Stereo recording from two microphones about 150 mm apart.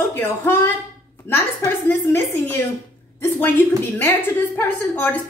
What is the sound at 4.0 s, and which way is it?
A woman's voice, 15° left (ahead or behind).